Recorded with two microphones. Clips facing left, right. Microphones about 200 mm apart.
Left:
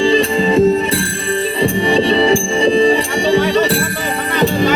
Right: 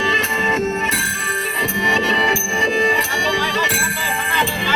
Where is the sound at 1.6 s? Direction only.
30° left (ahead or behind).